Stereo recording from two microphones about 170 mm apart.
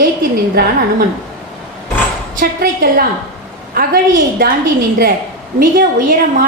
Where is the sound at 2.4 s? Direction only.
60° right (ahead or behind).